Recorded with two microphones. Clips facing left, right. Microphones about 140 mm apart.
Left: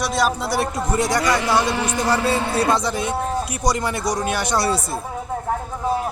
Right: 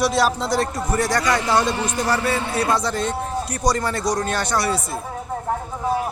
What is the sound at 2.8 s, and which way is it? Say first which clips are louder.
A man's voice: left 1 dB; 15° left (ahead or behind).